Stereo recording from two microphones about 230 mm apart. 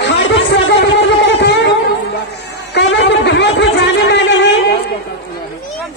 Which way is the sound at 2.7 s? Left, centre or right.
Left.